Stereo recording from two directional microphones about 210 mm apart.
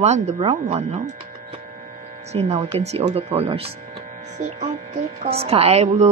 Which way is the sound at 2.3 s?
30° right (ahead or behind).